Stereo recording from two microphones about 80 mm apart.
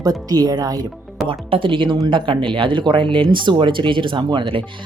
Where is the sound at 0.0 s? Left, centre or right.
Right.